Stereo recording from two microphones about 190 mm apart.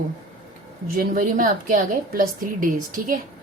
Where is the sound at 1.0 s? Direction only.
45° right (ahead or behind).